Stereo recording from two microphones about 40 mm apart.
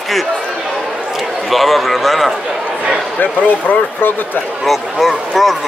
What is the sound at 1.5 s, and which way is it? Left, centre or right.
Speech, centre.